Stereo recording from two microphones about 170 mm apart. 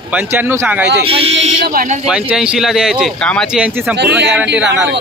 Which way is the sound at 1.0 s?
35° right (ahead or behind).